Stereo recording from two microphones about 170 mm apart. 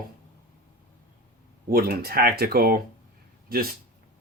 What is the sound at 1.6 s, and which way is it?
Speech, 65° right (ahead or behind).